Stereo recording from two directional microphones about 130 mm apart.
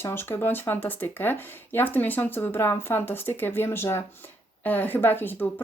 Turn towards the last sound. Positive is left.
turn(degrees=15)  # may be behind; listen again after turning